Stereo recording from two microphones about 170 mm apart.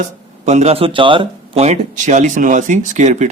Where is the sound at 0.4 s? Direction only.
40° right (ahead or behind).